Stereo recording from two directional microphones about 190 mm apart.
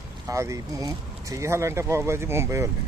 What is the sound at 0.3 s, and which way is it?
Speech, 15° right (ahead or behind).